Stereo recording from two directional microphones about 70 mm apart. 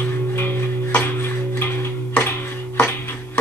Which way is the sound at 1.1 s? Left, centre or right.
Left.